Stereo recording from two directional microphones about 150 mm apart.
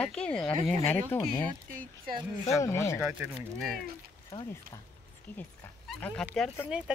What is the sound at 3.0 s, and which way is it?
Speech, 5° right (ahead or behind).